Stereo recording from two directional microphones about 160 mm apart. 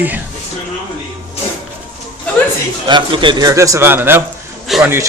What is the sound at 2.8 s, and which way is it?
A man's voice, 30° right (ahead or behind).